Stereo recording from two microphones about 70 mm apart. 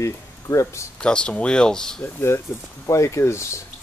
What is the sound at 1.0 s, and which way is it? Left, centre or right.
Speech, centre.